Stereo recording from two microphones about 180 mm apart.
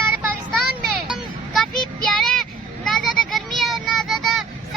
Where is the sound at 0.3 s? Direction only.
Centre (ahead or behind).